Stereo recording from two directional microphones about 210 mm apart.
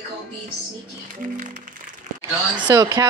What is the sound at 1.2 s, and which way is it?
Music, 35° right (ahead or behind).